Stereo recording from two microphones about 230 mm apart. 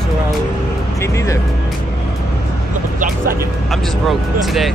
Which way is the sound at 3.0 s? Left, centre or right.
Right.